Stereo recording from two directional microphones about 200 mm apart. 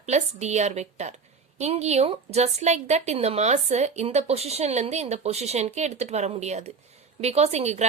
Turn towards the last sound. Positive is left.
turn(degrees=-35)  # may be behind; listen again after turning